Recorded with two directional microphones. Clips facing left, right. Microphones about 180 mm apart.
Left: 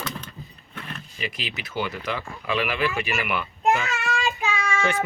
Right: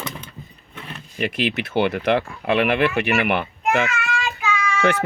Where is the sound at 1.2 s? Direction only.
60° right (ahead or behind).